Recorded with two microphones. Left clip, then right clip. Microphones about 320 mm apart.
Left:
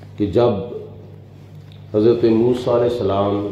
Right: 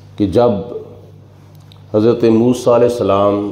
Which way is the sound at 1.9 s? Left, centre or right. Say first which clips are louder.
Right 3 dB; right.